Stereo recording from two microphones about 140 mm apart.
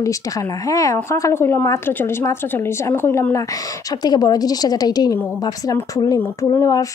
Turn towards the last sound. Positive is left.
turn(degrees=25)  # may be behind; listen again after turning